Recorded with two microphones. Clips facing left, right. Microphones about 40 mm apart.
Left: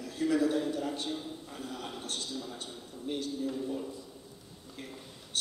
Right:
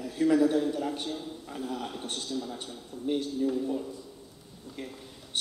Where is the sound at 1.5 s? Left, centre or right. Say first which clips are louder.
Right 8 dB; centre.